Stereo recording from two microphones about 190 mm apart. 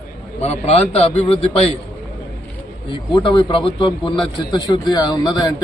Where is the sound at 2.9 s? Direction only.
25° left (ahead or behind).